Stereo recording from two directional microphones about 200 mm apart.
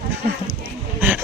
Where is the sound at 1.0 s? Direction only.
10° right (ahead or behind).